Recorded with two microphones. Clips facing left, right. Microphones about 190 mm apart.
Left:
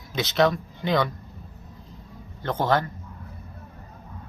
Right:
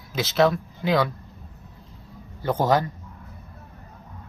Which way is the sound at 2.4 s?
10° right (ahead or behind).